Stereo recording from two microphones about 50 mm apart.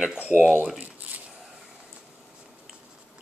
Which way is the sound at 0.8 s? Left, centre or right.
Right.